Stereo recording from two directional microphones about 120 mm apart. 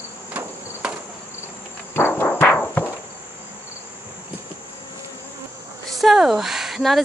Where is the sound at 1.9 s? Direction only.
20° left (ahead or behind).